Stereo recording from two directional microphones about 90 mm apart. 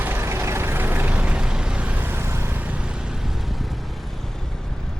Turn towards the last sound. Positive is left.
turn(degrees=0)  # may be behind; listen again after turning